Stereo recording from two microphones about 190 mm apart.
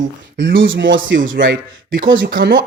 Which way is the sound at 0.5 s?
85° right.